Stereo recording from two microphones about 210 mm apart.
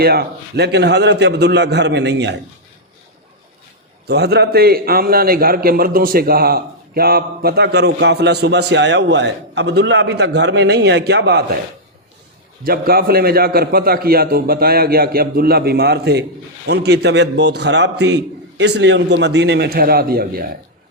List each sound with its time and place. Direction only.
0.0 s a man's voice: 50° right (ahead or behind)
4.0 s a man's voice: 50° right (ahead or behind)
12.6 s a man's voice: 45° right (ahead or behind)